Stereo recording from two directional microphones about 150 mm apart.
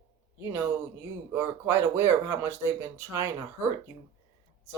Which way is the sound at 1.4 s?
15° right (ahead or behind).